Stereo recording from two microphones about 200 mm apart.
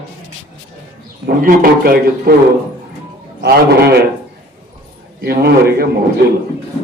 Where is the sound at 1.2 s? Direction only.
45° right (ahead or behind).